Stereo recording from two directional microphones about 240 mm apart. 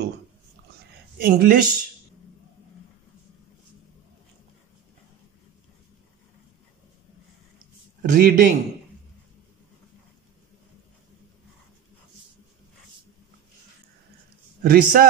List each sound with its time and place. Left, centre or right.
1.1 s speech: right
7.5 s a sound: right
14.6 s speech: right